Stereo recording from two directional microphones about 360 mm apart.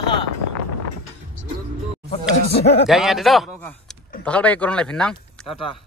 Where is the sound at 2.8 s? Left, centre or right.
Centre.